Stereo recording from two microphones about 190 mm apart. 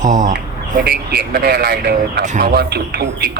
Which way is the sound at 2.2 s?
45° right (ahead or behind).